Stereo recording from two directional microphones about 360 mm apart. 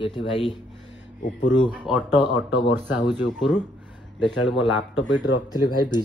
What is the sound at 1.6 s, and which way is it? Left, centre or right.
Speech, centre.